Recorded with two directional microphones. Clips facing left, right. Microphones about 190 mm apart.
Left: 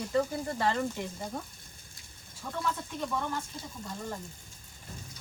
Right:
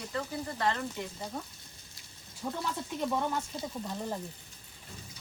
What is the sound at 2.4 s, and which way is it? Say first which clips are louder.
Speech: right 3 dB; 25° right (ahead or behind).